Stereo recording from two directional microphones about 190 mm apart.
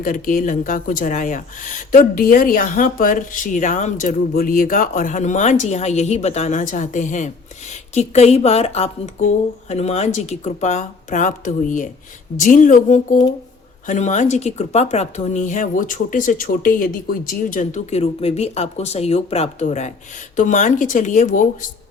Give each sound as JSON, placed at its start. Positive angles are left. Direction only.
{"t": 0.0, "sound": "speech", "side_deg": 45}